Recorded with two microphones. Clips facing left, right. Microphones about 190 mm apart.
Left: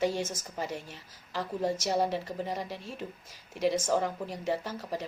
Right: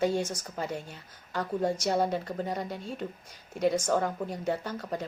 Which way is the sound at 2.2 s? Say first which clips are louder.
Right 2 dB; centre (ahead or behind).